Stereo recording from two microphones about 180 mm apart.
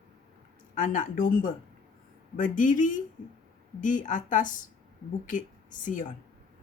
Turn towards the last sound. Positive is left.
turn(degrees=45)  # may be behind; listen again after turning